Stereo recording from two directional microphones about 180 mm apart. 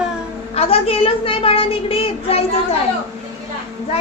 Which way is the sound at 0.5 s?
30° left (ahead or behind).